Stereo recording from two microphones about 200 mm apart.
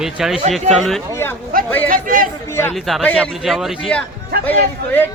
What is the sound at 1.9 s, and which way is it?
Speech, 45° right (ahead or behind).